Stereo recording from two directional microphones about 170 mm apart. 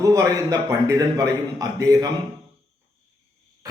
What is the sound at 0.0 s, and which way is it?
Speech, 20° right (ahead or behind).